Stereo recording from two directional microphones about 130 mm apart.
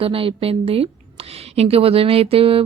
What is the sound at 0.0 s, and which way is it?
A woman's voice, 45° right (ahead or behind).